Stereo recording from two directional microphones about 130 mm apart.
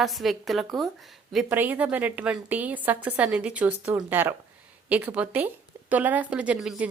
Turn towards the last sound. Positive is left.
turn(degrees=-10)  # may be behind; listen again after turning